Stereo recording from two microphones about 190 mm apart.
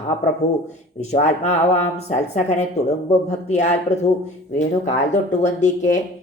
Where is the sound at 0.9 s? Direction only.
35° left (ahead or behind).